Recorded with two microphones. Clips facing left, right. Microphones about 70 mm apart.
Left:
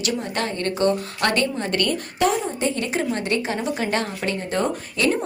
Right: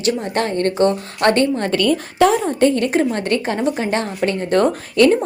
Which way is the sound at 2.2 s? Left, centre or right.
Right.